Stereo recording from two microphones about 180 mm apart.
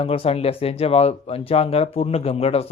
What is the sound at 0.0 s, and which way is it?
A man's voice, 35° left (ahead or behind).